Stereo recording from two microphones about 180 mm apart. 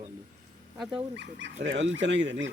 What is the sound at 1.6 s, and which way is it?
Speech, 90° right.